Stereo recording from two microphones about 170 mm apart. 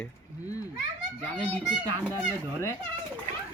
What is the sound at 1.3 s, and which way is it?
Speech, 5° left (ahead or behind).